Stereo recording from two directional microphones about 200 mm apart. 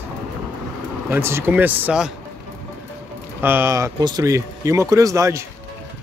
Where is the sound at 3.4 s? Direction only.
10° right (ahead or behind).